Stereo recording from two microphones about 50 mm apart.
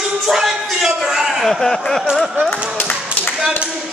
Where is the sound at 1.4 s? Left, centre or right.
Centre.